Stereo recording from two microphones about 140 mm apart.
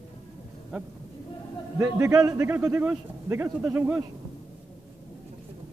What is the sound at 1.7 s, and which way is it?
A man's voice, 20° right (ahead or behind).